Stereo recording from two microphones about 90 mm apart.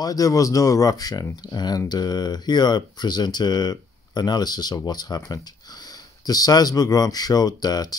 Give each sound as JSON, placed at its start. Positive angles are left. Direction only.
{"t": 0.0, "sound": "speech", "side_deg": 40}